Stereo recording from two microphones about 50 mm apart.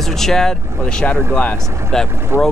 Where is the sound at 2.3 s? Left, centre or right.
Right.